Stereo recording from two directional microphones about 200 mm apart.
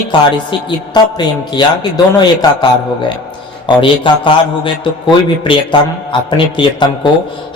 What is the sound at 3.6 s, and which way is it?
A man's voice, 25° left (ahead or behind).